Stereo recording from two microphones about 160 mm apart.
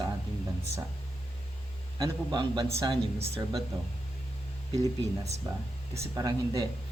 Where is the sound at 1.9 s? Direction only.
25° right (ahead or behind).